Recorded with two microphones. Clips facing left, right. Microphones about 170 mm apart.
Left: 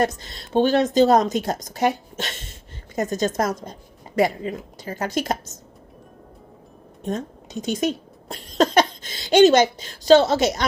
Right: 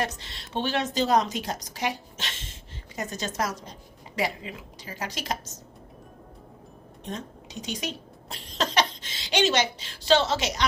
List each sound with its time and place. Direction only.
0.0 s a woman's voice: 45° left (ahead or behind)
7.0 s a woman's voice: 45° left (ahead or behind)